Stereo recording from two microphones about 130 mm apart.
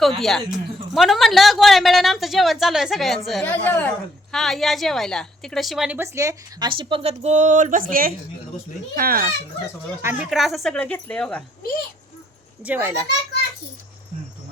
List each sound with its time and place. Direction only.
0.0 s speech: centre (ahead or behind)
3.4 s speech: 15° left (ahead or behind); by 6.0 s 5° right (ahead or behind)
6.0 s speech: 25° right (ahead or behind)
6.7 s a woman's voice: 40° right (ahead or behind); by 9.3 s 90° right
10.0 s a child's voice: 20° right (ahead or behind)
10.2 s speech: centre (ahead or behind)
10.8 s speech: 10° left (ahead or behind)
12.6 s a child's voice: 15° right (ahead or behind)